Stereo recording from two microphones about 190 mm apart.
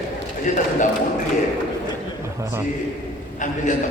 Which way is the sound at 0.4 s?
40° left (ahead or behind).